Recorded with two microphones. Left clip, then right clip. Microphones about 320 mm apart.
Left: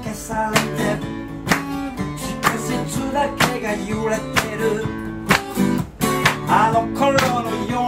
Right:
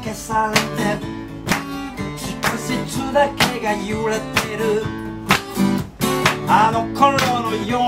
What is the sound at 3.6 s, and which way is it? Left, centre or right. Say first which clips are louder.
Music: right 2 dB; centre.